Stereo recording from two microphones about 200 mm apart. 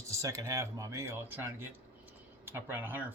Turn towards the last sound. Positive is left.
turn(degrees=-10)  # may be behind; listen again after turning